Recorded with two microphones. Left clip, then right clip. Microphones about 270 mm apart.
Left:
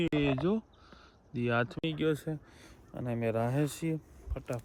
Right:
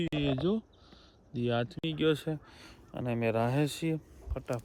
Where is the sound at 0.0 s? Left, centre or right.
Left.